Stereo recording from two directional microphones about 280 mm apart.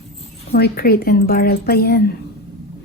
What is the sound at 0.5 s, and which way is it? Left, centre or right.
A woman's voice, left.